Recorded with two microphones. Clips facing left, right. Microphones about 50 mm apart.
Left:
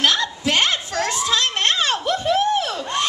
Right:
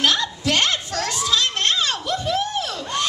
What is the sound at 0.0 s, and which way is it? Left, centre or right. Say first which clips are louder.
Children playing: left 1 dB; centre.